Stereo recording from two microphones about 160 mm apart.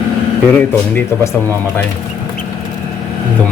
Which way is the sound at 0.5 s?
15° left (ahead or behind).